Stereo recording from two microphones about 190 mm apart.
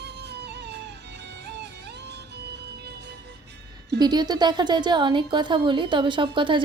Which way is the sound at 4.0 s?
20° right (ahead or behind).